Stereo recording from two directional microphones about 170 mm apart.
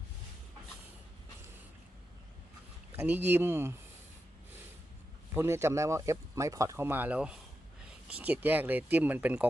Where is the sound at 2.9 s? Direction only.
10° right (ahead or behind).